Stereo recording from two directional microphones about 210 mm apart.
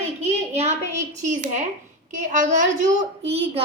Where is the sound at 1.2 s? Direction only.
35° right (ahead or behind).